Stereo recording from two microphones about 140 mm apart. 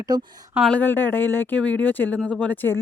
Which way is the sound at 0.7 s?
15° left (ahead or behind).